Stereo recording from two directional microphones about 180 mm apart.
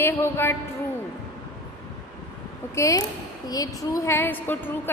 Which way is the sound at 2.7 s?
15° left (ahead or behind).